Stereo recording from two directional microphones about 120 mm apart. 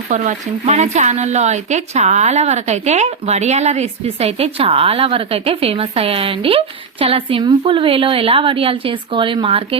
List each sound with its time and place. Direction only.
0.1 s speech: 80° right; by 9.6 s 50° right (ahead or behind)